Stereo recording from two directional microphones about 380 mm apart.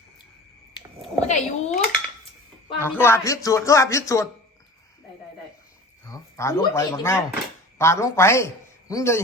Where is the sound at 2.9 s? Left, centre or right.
Centre.